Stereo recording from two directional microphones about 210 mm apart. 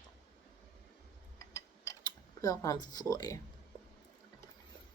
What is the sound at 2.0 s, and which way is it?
Speech, 15° left (ahead or behind).